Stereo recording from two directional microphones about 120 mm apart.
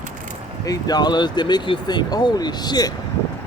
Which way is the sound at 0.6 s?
30° left (ahead or behind).